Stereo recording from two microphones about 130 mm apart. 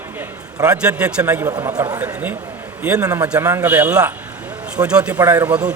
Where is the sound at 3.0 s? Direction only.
25° right (ahead or behind).